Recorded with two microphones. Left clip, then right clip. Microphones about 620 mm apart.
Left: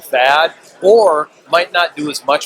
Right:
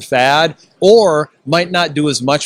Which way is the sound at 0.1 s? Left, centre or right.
Right.